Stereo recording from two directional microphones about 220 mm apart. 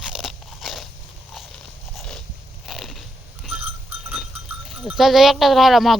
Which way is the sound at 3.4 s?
Centre (ahead or behind).